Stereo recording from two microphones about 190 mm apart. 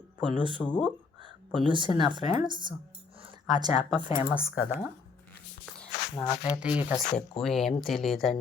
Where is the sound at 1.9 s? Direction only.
25° right (ahead or behind).